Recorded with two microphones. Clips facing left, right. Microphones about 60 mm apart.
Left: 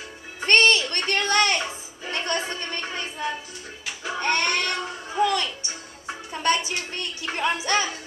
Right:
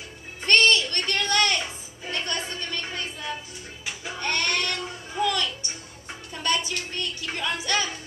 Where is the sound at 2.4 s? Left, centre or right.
Left.